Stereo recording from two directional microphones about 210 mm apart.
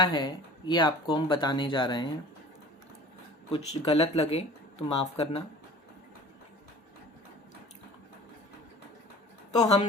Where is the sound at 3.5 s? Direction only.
25° left (ahead or behind).